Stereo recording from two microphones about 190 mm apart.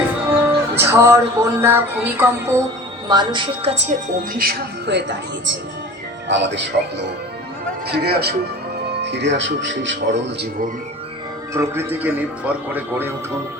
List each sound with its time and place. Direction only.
0.3 s music: 10° right (ahead or behind)
3.1 s a woman's voice: 25° right (ahead or behind)
4.4 s a man's voice: 60° right (ahead or behind)
11.5 s a man's voice: 15° right (ahead or behind)